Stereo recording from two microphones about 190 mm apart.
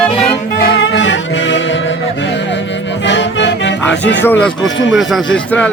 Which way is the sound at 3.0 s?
70° left (ahead or behind).